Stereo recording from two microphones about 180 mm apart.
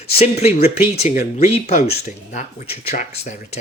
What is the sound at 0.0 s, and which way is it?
Speech, 35° left (ahead or behind).